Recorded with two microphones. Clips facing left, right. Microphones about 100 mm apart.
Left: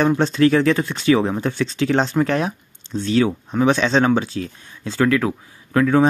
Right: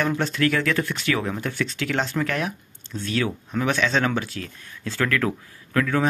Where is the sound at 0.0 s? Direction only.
25° left (ahead or behind).